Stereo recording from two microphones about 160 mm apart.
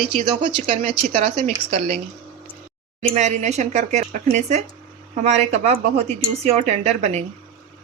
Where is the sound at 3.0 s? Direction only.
45° right (ahead or behind).